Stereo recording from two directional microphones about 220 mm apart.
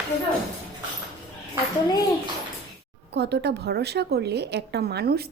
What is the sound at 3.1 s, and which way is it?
A woman's voice, 50° right (ahead or behind).